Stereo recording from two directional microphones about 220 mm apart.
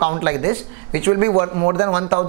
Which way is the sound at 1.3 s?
25° right (ahead or behind).